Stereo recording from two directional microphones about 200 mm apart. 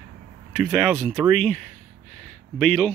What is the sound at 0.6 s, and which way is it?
Speech, centre (ahead or behind).